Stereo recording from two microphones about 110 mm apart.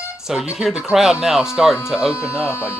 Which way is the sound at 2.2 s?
25° left (ahead or behind).